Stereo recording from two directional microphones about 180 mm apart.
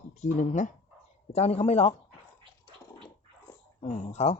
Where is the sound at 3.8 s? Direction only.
35° left (ahead or behind).